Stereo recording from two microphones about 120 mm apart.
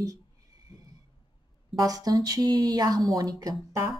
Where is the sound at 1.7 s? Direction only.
30° right (ahead or behind).